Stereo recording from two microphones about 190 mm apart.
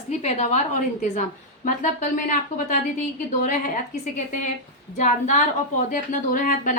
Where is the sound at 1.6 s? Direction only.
45° left (ahead or behind).